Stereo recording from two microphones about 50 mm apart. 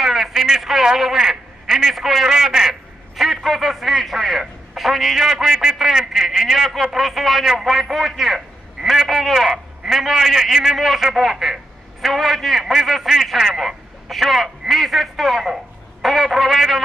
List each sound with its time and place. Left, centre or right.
0.0 s a man's voice: centre